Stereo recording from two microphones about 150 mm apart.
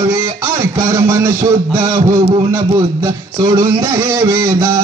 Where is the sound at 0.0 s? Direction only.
20° right (ahead or behind).